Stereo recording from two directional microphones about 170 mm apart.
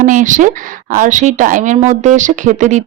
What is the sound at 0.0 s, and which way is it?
Speech, 50° right (ahead or behind).